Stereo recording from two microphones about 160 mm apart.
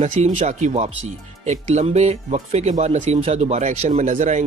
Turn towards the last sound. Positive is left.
turn(degrees=-50)  # may be behind; listen again after turning